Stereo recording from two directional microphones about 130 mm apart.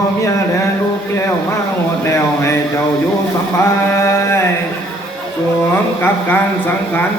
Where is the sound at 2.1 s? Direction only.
20° left (ahead or behind).